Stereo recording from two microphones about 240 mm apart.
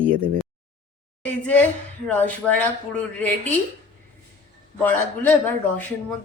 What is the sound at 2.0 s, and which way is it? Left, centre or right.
A man's voice, centre.